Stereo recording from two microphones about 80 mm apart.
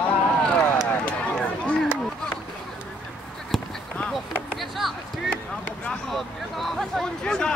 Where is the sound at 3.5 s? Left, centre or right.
Centre.